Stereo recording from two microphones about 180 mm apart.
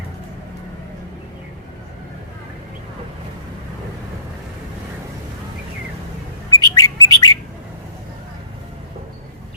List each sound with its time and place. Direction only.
6.5 s bird: 20° left (ahead or behind)